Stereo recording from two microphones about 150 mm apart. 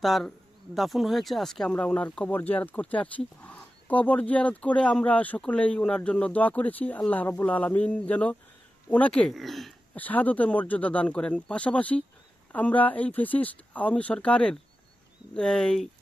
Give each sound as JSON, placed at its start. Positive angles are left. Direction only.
{"t": 0.0, "sound": "speech", "side_deg": 0}
{"t": 10.0, "sound": "speech", "side_deg": 10}